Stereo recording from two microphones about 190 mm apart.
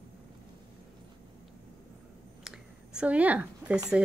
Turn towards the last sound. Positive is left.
turn(degrees=-5)  # may be behind; listen again after turning